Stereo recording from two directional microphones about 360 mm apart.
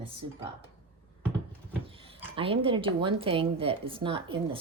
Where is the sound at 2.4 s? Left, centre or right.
Centre.